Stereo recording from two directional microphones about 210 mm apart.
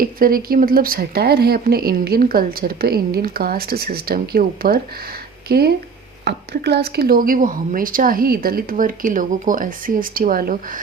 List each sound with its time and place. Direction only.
0.0 s speech: 45° right (ahead or behind)